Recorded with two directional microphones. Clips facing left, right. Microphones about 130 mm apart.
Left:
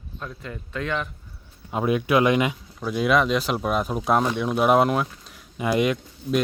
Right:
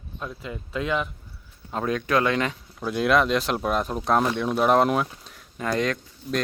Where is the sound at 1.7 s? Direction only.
10° left (ahead or behind).